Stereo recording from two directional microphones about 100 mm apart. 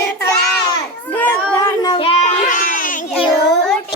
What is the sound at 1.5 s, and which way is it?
Child singing, 45° left (ahead or behind).